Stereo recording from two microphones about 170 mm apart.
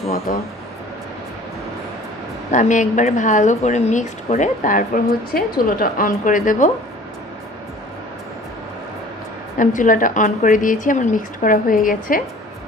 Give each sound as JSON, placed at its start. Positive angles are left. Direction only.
{"t": 0.3, "sound": "speech", "side_deg": 55}
{"t": 2.5, "sound": "a woman's voice", "side_deg": 45}
{"t": 9.6, "sound": "a woman's voice", "side_deg": 50}